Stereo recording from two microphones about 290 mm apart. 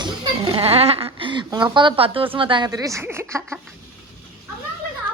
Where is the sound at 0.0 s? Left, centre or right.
Centre.